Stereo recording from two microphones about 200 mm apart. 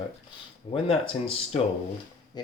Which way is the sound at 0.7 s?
25° left (ahead or behind).